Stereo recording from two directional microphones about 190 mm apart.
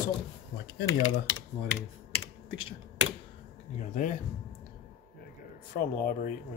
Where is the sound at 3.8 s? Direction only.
40° left (ahead or behind).